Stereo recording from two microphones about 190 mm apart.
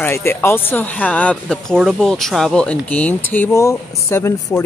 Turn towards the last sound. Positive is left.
turn(degrees=15)  # may be behind; listen again after turning